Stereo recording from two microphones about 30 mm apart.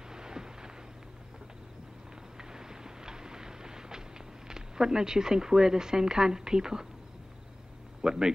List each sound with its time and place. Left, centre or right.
0.1 s a sound: right
2.3 s vehicle: right
4.5 s speech: right
8.0 s speech: right